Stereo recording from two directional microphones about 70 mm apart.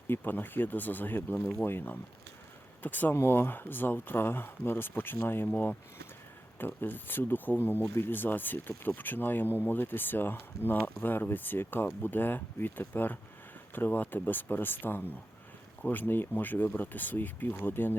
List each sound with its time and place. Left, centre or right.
0.1 s speech: left